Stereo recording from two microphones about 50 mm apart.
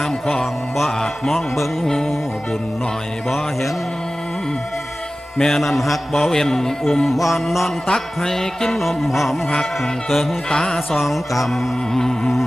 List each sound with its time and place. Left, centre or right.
0.0 s music: centre
3.2 s music: centre
5.4 s music: centre
7.9 s music: centre
9.5 s music: centre
10.9 s music: centre